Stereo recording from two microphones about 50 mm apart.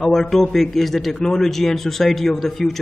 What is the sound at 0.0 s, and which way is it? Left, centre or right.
Speech, centre.